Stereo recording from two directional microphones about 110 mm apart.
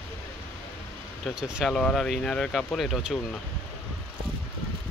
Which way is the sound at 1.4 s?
5° right (ahead or behind).